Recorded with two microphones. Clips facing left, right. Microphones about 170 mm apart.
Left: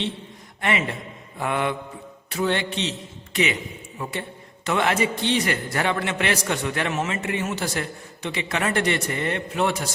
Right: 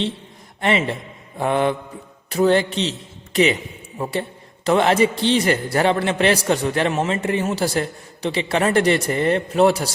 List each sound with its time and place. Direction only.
0.6 s a man's voice: 30° right (ahead or behind)